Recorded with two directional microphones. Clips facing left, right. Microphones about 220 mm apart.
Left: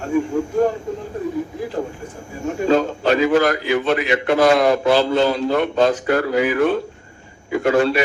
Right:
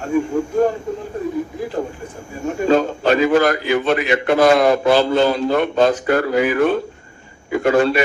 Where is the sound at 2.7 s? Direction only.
50° right (ahead or behind).